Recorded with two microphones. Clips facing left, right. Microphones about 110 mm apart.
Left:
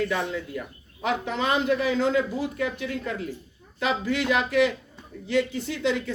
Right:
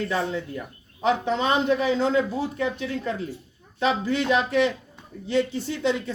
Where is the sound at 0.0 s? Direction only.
30° right (ahead or behind).